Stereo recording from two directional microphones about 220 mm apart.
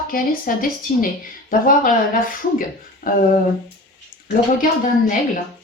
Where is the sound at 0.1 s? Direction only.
40° left (ahead or behind).